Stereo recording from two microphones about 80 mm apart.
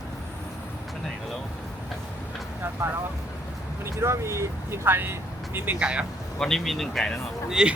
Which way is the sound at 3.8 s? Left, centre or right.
Right.